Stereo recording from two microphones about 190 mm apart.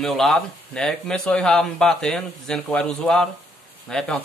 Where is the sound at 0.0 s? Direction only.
Centre (ahead or behind).